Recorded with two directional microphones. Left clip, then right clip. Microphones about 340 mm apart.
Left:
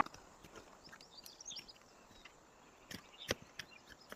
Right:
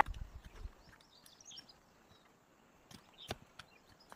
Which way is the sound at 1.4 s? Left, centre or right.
Right.